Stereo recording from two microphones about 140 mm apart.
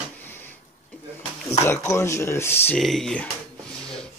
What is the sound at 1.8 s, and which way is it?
Speech, 20° left (ahead or behind).